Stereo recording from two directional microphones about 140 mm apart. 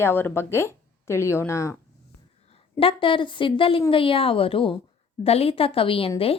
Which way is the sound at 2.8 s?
40° left (ahead or behind).